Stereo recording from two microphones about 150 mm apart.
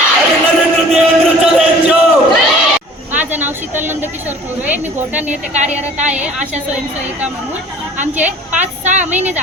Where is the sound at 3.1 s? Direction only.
10° right (ahead or behind).